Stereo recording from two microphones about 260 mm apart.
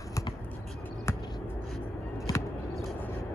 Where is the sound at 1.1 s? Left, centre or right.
Centre.